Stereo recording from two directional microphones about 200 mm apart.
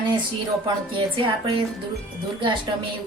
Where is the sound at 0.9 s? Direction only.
25° right (ahead or behind).